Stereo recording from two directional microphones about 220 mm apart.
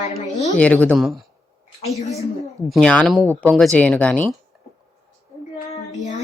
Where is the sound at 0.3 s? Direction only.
30° left (ahead or behind).